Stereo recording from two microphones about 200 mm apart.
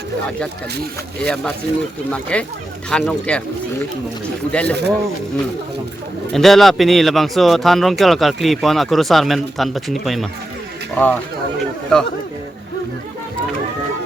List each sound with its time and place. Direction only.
1.2 s speech: 5° left (ahead or behind)
4.6 s speech: 55° right (ahead or behind)
6.3 s speech: centre (ahead or behind)